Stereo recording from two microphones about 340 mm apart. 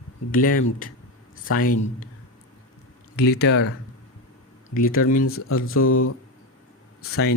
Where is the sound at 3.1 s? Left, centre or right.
Left.